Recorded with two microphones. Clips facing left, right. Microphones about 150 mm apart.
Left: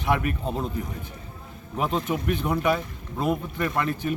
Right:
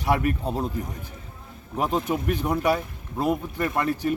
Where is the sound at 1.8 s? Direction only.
15° right (ahead or behind).